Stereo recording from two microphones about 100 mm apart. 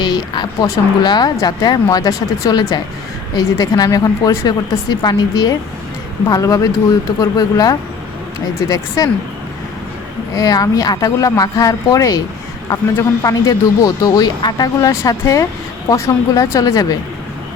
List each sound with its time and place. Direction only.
0.0 s speech: 45° left (ahead or behind)
9.0 s speech: 35° left (ahead or behind)
10.3 s speech: 35° left (ahead or behind)